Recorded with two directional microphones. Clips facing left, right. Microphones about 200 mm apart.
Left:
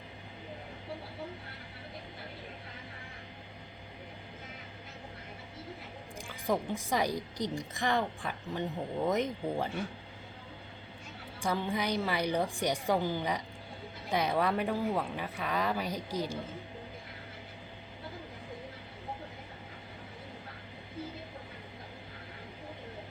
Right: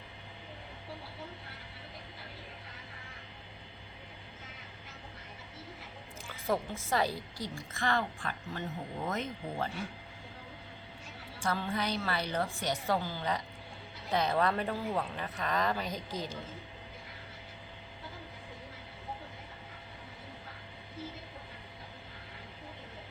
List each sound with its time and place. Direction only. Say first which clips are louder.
6.2 s a woman's voice: left 1 dB; 15° left (ahead or behind)
11.3 s a woman's voice: left 2 dB; 15° left (ahead or behind)